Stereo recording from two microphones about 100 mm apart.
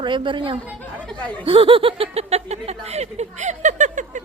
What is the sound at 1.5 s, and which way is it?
Speech, 65° right (ahead or behind).